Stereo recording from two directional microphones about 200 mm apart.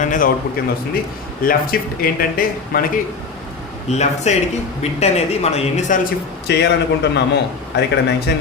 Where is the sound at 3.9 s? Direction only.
35° left (ahead or behind).